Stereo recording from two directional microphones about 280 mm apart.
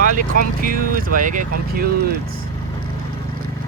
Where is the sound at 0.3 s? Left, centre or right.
Right.